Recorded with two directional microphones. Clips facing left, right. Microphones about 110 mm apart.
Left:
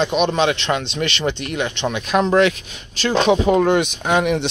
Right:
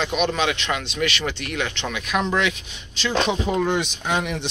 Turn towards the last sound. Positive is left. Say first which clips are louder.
# left 7 dB
turn(degrees=60)  # may be behind; listen again after turning